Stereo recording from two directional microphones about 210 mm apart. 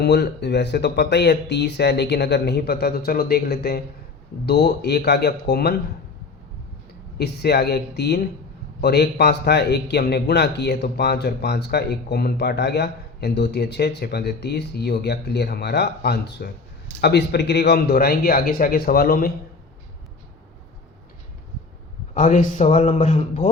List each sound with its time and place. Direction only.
0.0 s speech: 50° left (ahead or behind)
7.2 s speech: 50° left (ahead or behind)
22.1 s a man's voice: 40° left (ahead or behind)